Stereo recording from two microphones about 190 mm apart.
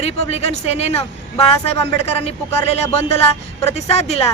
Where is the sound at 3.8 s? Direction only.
35° left (ahead or behind).